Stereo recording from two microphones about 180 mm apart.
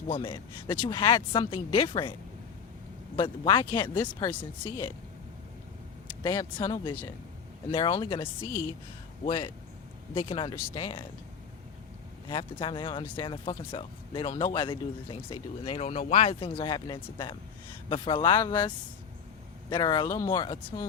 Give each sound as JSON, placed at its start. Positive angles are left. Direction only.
{"t": 0.1, "sound": "speech", "side_deg": 25}
{"t": 3.2, "sound": "speech", "side_deg": 25}
{"t": 4.2, "sound": "speech", "side_deg": 10}
{"t": 6.2, "sound": "speech", "side_deg": 20}
{"t": 10.5, "sound": "speech", "side_deg": 15}
{"t": 12.3, "sound": "speech", "side_deg": 25}
{"t": 19.7, "sound": "speech", "side_deg": 25}
{"t": 20.3, "sound": "speech", "side_deg": 25}
{"t": 20.6, "sound": "speech", "side_deg": 10}